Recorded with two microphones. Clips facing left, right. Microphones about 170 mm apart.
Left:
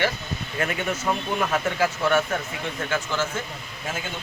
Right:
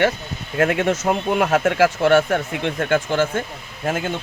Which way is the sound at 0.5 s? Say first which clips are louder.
Right 9 dB; 85° right.